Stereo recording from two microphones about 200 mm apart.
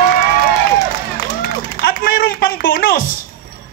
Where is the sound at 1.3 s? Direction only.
45° left (ahead or behind).